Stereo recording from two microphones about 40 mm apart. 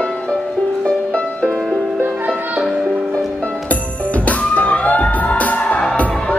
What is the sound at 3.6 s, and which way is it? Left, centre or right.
Music, left.